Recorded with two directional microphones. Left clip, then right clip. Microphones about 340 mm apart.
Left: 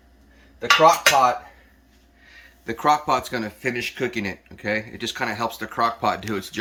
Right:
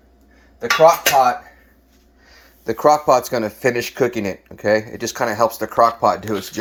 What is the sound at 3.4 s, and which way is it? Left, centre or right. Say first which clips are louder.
Speech: right 7 dB; right.